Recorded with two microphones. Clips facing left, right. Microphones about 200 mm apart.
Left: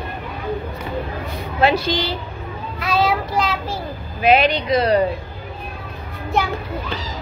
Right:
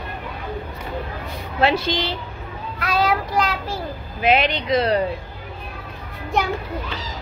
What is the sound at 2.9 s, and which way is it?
Child singing, 10° right (ahead or behind).